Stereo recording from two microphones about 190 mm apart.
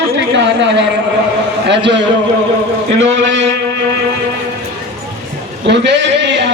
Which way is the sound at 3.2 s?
75° right (ahead or behind).